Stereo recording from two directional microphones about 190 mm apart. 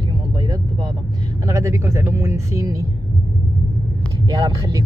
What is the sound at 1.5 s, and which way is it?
Speech, 15° right (ahead or behind).